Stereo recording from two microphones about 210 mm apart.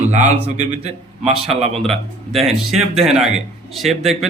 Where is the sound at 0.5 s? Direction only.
30° right (ahead or behind).